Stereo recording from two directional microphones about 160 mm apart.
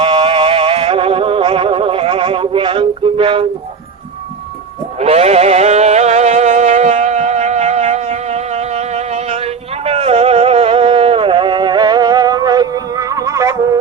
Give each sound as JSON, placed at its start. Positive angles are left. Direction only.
{"t": 0.0, "sound": "music", "side_deg": -35}
{"t": 4.9, "sound": "music", "side_deg": -40}